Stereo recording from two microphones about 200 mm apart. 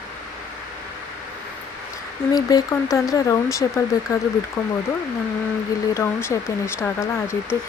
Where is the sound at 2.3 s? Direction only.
20° left (ahead or behind).